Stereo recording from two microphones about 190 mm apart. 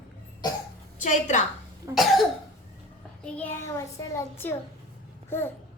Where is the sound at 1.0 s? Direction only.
40° left (ahead or behind).